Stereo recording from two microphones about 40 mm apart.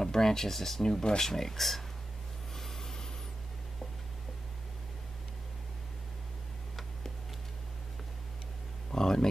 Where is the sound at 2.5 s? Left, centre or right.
Centre.